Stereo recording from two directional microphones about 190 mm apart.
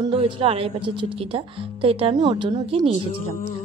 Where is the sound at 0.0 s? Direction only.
30° right (ahead or behind).